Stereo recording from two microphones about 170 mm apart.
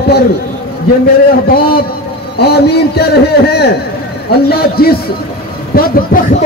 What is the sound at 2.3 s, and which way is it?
A man's voice, 70° left (ahead or behind).